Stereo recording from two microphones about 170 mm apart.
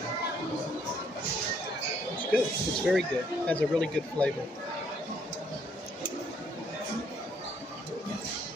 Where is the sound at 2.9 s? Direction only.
5° left (ahead or behind).